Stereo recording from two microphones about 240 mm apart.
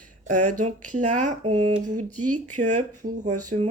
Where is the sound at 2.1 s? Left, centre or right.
Right.